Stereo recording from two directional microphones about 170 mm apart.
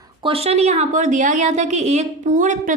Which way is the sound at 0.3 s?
35° right (ahead or behind).